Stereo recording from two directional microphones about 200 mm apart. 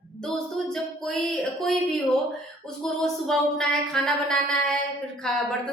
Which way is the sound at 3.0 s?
Centre (ahead or behind).